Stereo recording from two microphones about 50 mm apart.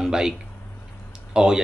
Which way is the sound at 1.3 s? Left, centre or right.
Centre.